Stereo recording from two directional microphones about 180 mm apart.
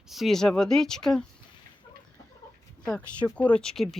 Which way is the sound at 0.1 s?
Centre (ahead or behind).